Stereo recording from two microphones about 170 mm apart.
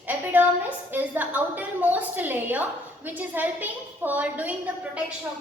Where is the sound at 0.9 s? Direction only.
10° right (ahead or behind).